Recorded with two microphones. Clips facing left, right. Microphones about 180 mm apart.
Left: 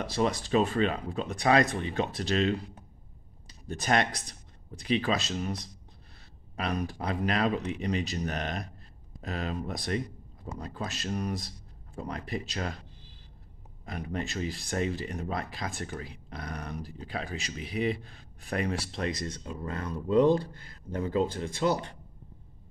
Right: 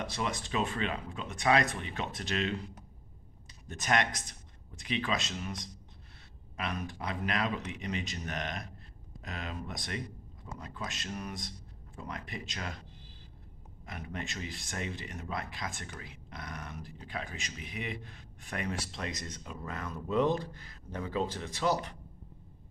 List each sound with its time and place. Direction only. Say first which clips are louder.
0.0 s speech: left 7 dB; 35° left (ahead or behind)
3.6 s speech: left 3 dB; 35° left (ahead or behind)
13.8 s speech: left 6 dB; 35° left (ahead or behind)